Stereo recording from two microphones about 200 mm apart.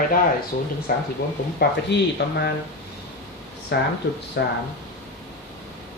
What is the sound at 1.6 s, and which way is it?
Speech, 60° left (ahead or behind).